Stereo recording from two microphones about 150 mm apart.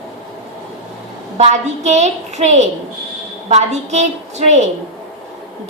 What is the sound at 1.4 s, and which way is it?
A woman's voice, 50° right (ahead or behind).